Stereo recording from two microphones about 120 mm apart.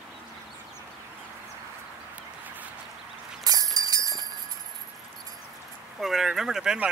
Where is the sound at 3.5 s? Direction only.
30° right (ahead or behind).